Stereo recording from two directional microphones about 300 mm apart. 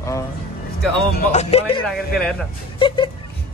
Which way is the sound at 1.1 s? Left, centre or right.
Left.